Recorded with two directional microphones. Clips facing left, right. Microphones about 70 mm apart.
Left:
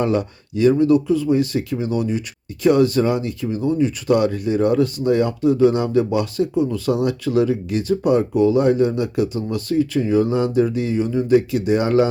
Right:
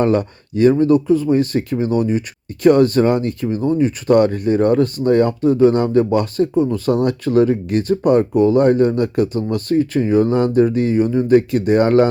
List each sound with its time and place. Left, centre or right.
0.0 s speech: right